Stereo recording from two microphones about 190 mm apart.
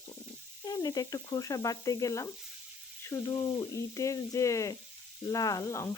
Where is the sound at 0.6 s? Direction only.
20° left (ahead or behind).